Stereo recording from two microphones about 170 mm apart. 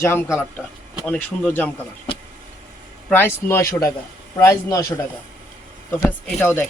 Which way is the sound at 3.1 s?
10° left (ahead or behind).